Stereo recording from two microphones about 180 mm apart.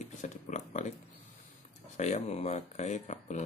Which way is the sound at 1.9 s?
40° left (ahead or behind).